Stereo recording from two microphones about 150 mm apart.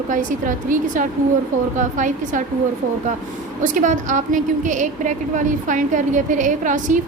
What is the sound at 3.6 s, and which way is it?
A woman's voice, 55° right (ahead or behind).